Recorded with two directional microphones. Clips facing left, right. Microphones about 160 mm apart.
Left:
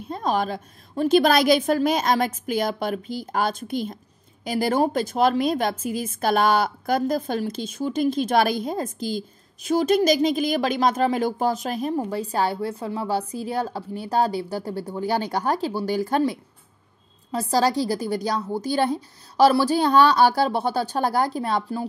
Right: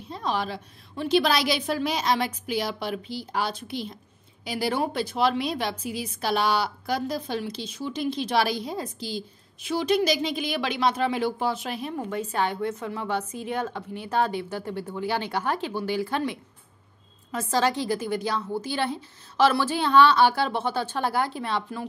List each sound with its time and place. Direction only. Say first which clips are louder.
0.1 s a woman's voice: left 5 dB; 45° left (ahead or behind)